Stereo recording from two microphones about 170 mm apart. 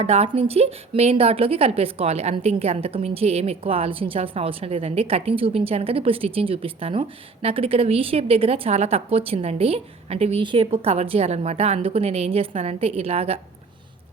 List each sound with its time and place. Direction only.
0.0 s a woman's voice: 35° right (ahead or behind)